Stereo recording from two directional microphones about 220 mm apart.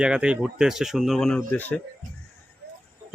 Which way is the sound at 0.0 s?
5° right (ahead or behind).